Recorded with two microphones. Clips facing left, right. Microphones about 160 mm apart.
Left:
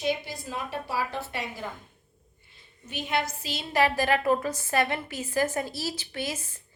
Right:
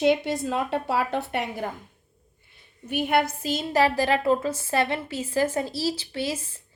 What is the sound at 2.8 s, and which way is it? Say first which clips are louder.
A woman's voice: right 7 dB; 60° right (ahead or behind).